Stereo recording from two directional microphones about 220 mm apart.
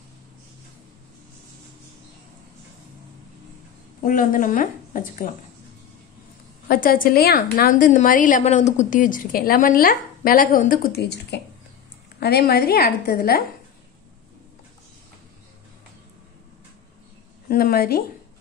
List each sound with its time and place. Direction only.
4.0 s a woman's voice: 40° left (ahead or behind)
6.7 s a woman's voice: 40° left (ahead or behind)
17.5 s a woman's voice: 45° left (ahead or behind)